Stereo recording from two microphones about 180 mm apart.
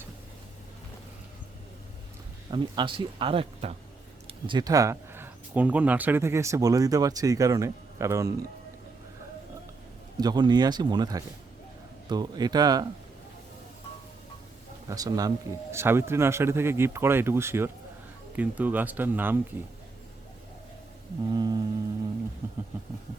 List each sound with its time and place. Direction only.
2.5 s speech: 25° right (ahead or behind)
10.2 s speech: 25° right (ahead or behind)
14.8 s speech: 20° right (ahead or behind)
21.3 s speech: 20° right (ahead or behind)